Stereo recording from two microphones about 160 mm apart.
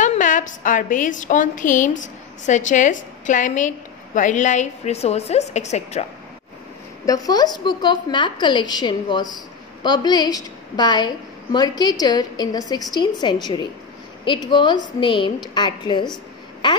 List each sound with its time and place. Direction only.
0.0 s a woman's voice: 50° left (ahead or behind)
7.1 s a woman's voice: 25° left (ahead or behind)